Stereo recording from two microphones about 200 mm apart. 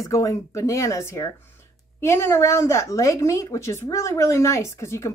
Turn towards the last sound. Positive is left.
turn(degrees=15)  # may be behind; listen again after turning